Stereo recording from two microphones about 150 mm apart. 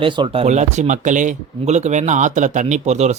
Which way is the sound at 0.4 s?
50° right (ahead or behind).